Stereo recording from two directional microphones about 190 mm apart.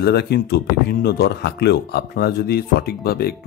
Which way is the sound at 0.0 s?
60° left (ahead or behind).